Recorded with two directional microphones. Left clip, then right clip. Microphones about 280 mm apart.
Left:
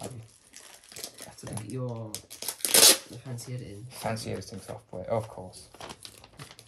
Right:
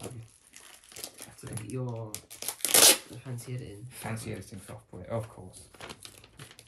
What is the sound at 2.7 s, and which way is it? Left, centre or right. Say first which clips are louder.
Tearing: left 2 dB; centre.